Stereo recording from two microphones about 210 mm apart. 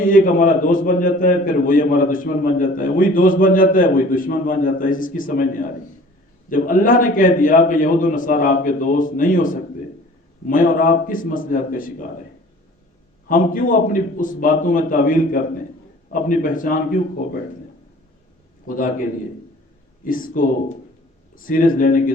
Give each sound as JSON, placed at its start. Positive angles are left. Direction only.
{"t": 0.0, "sound": "a man's voice", "side_deg": 40}
{"t": 13.2, "sound": "a man's voice", "side_deg": 40}
{"t": 18.7, "sound": "a man's voice", "side_deg": 40}
{"t": 20.1, "sound": "a man's voice", "side_deg": 40}